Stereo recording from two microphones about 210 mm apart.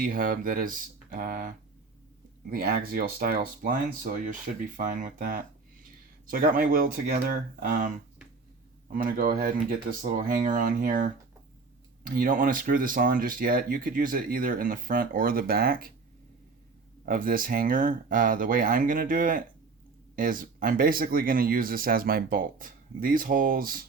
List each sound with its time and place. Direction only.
0.0 s speech: 40° right (ahead or behind)
8.9 s speech: 40° right (ahead or behind)
17.1 s speech: 40° right (ahead or behind)